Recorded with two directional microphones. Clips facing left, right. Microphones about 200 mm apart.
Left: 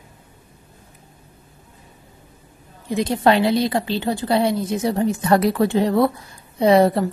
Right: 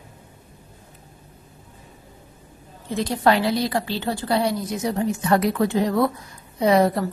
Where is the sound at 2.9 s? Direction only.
20° left (ahead or behind).